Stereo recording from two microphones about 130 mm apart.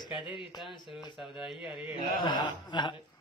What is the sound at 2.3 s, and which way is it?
Mantra, 35° left (ahead or behind).